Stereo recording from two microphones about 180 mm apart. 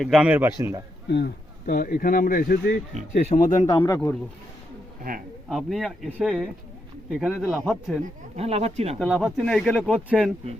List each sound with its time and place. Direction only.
0.0 s a man's voice: 5° right (ahead or behind)
1.1 s speech: 65° left (ahead or behind)
2.9 s speech: 40° right (ahead or behind)
3.3 s speech: 45° left (ahead or behind)
3.7 s speech: 20° left (ahead or behind)
5.5 s speech: centre (ahead or behind)
8.4 s speech: 35° right (ahead or behind)
9.0 s speech: 5° left (ahead or behind)